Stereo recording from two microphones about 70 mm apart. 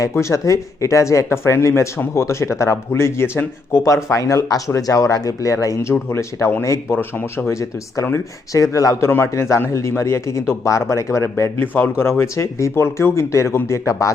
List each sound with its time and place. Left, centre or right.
0.1 s speech: left
5.9 s speech: left
11.6 s speech: left